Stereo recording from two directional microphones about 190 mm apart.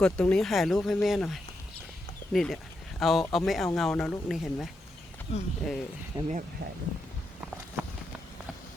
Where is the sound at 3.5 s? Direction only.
Centre (ahead or behind).